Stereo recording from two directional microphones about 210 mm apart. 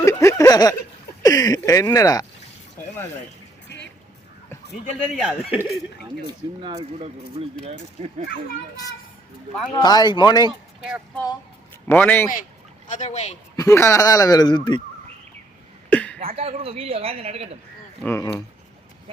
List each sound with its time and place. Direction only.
0.0 s a sound: 15° left (ahead or behind)
1.2 s speech: 15° left (ahead or behind)
4.7 s a man's voice: centre (ahead or behind)
6.6 s a man's voice: 25° right (ahead or behind)
8.7 s speech: 15° left (ahead or behind)
11.9 s speech: 10° left (ahead or behind)
12.9 s speech: 35° left (ahead or behind)
13.6 s speech: 15° left (ahead or behind)
15.9 s a sound: 5° left (ahead or behind)
16.1 s a man's voice: 30° right (ahead or behind)
18.0 s speech: 10° left (ahead or behind)